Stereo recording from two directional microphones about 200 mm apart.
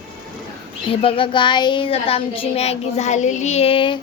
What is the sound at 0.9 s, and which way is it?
A child's voice, 25° left (ahead or behind).